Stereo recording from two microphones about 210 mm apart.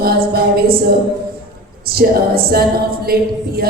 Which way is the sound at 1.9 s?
45° right (ahead or behind).